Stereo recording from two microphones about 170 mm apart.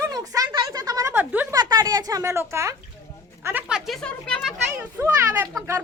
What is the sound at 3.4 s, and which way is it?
Speech, 10° right (ahead or behind).